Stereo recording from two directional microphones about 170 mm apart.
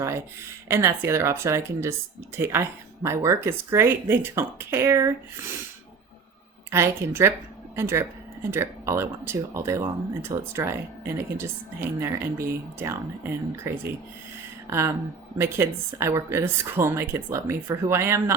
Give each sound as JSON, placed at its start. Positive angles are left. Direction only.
{"t": 0.7, "sound": "speech", "side_deg": -15}
{"t": 6.7, "sound": "speech", "side_deg": -15}